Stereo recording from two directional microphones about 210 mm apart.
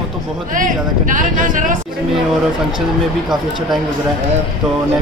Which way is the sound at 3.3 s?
Centre (ahead or behind).